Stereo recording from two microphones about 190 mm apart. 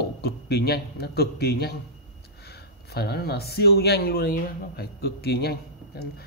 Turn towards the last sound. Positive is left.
turn(degrees=55)  # may be behind; listen again after turning